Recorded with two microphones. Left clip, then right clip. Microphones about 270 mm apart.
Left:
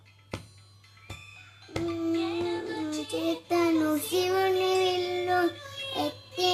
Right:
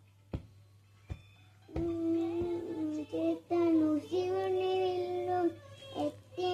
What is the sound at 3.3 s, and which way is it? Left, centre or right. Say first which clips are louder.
Child singing: left 4 dB; centre.